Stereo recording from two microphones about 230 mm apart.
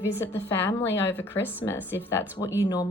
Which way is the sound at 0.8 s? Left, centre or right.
Left.